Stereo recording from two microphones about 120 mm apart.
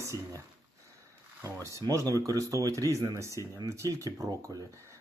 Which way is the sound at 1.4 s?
25° right (ahead or behind).